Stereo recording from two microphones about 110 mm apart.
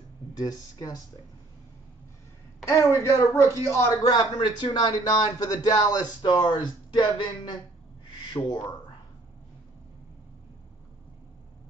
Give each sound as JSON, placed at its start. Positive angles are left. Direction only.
{"t": 0.4, "sound": "a man's voice", "side_deg": 35}
{"t": 2.8, "sound": "speech", "side_deg": 25}
{"t": 4.1, "sound": "a man's voice", "side_deg": 40}
{"t": 8.4, "sound": "a man's voice", "side_deg": 30}